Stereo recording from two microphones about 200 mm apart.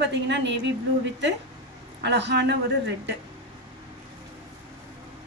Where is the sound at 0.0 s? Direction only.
60° right (ahead or behind).